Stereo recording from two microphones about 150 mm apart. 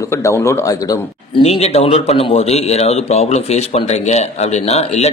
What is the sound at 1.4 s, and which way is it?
Speech, 45° left (ahead or behind).